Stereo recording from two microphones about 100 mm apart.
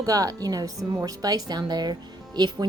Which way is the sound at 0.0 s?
35° right (ahead or behind).